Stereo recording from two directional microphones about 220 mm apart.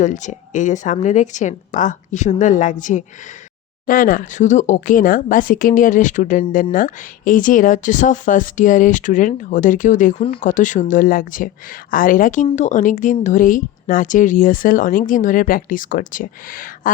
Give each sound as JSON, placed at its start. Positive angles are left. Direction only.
{"t": 0.0, "sound": "speech", "side_deg": 35}